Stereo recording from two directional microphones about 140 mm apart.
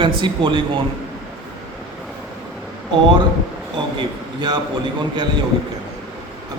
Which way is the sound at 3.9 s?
30° right (ahead or behind).